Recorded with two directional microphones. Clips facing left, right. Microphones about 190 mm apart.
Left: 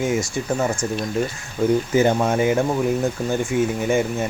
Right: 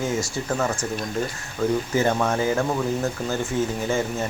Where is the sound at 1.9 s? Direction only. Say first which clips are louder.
Left 4 dB; 20° left (ahead or behind).